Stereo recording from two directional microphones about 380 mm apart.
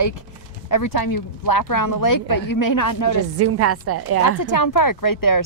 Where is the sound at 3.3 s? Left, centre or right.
Right.